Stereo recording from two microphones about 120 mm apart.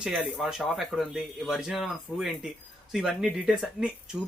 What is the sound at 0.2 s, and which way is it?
Speech, 5° right (ahead or behind).